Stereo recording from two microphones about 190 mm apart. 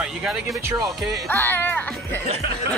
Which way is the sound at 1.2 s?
10° left (ahead or behind).